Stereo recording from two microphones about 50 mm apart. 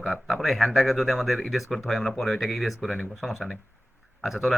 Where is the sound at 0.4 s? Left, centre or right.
Centre.